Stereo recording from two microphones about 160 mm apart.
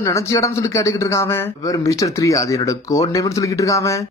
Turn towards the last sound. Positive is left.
turn(degrees=20)  # may be behind; listen again after turning